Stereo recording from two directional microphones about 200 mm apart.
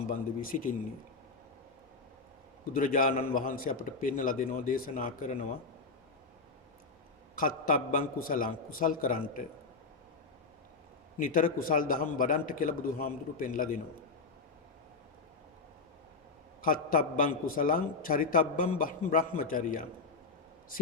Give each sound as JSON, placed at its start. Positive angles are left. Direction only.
{"t": 0.1, "sound": "speech", "side_deg": 40}
{"t": 2.7, "sound": "a man's voice", "side_deg": 45}
{"t": 7.3, "sound": "a man's voice", "side_deg": 45}
{"t": 11.2, "sound": "a man's voice", "side_deg": 45}
{"t": 16.6, "sound": "a man's voice", "side_deg": 45}